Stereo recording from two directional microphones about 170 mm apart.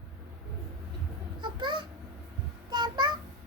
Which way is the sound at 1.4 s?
25° right (ahead or behind).